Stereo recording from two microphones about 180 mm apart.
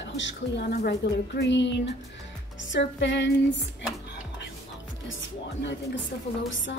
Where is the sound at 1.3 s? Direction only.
85° left.